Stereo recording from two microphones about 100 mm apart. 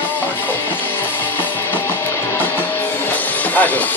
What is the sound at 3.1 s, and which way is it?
Music, 15° left (ahead or behind).